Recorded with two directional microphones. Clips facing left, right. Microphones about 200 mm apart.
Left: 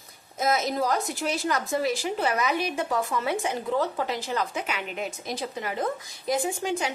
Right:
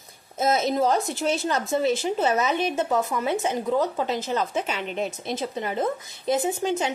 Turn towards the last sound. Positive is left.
turn(degrees=-20)  # may be behind; listen again after turning